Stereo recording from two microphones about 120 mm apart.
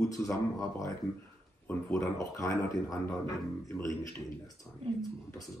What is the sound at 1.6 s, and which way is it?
Speech, 25° left (ahead or behind).